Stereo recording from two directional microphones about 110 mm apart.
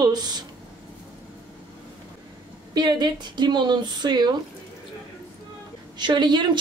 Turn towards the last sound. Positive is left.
turn(degrees=-45)  # may be behind; listen again after turning